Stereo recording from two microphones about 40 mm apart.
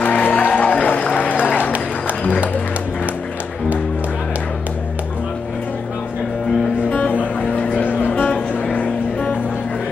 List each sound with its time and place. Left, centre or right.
0.0 s music: left
7.3 s vehicle: left
7.8 s music: left
8.1 s music: left